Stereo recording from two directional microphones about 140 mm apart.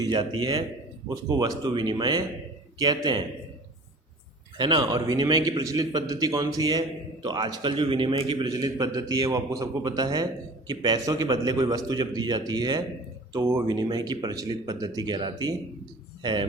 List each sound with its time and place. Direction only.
0.0 s a man's voice: 30° right (ahead or behind)
4.5 s a man's voice: 35° right (ahead or behind)
13.3 s a man's voice: 20° right (ahead or behind)
13.7 s a man's voice: 30° right (ahead or behind)